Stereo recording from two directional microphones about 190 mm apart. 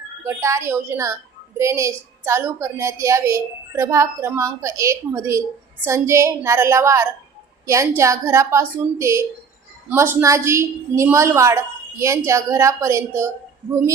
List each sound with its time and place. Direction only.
0.3 s a woman's voice: 15° right (ahead or behind)